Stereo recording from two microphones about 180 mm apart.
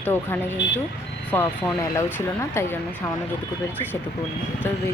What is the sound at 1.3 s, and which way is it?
Speech, 10° left (ahead or behind).